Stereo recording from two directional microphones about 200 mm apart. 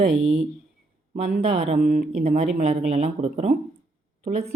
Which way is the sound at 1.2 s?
30° right (ahead or behind).